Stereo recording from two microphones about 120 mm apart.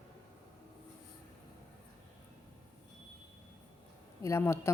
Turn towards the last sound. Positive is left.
turn(degrees=20)  # may be behind; listen again after turning